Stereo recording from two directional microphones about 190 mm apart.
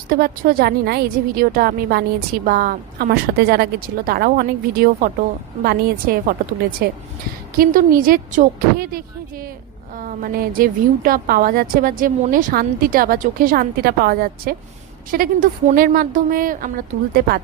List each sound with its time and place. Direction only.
0.1 s a woman's voice: 50° right (ahead or behind)